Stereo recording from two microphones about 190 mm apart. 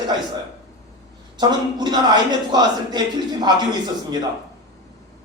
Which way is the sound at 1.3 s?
20° right (ahead or behind).